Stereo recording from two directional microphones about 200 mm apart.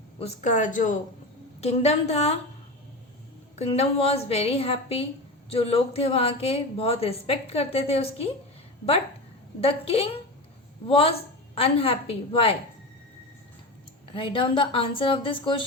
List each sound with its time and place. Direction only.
0.2 s speech: 35° left (ahead or behind)
3.5 s speech: 30° left (ahead or behind)
9.6 s a woman's voice: 30° left (ahead or behind)
14.1 s a woman's voice: 25° left (ahead or behind)